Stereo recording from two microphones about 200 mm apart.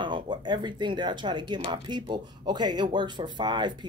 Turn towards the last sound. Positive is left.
turn(degrees=-20)  # may be behind; listen again after turning